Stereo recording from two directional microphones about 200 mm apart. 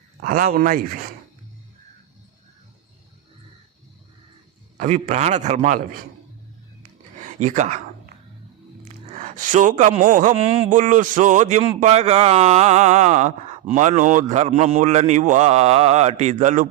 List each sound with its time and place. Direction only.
0.2 s a man's voice: 45° right (ahead or behind)
4.8 s speech: 40° right (ahead or behind)
7.2 s speech: 35° right (ahead or behind)
8.8 s speech: 35° right (ahead or behind)